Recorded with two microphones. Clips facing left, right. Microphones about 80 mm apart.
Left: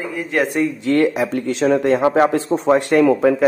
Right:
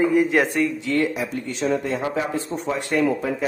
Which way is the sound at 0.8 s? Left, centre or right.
Left.